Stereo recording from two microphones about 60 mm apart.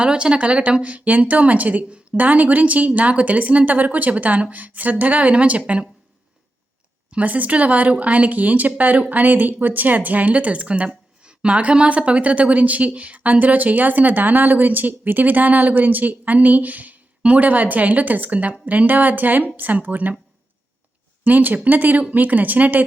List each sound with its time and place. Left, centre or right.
0.0 s speech: centre
7.1 s speech: right
21.2 s speech: right